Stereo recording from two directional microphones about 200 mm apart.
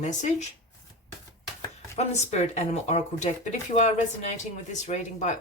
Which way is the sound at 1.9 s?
35° left (ahead or behind).